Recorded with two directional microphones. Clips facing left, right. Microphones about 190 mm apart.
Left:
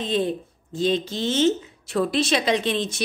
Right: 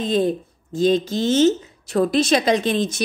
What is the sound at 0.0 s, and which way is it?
A woman's voice, 45° right (ahead or behind).